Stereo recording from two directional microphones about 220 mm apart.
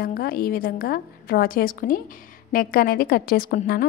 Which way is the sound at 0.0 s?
45° left (ahead or behind).